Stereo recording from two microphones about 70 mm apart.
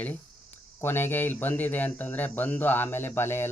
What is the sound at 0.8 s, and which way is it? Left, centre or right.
Speech, left.